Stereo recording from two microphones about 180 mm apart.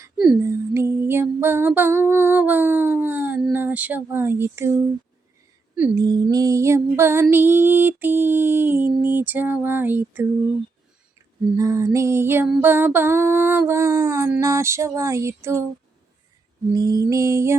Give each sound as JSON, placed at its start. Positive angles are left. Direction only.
{"t": 0.3, "sound": "a sound", "side_deg": -15}
{"t": 3.5, "sound": "speech", "side_deg": -10}
{"t": 6.0, "sound": "music", "side_deg": -20}
{"t": 11.5, "sound": "music", "side_deg": -20}
{"t": 16.7, "sound": "music", "side_deg": -20}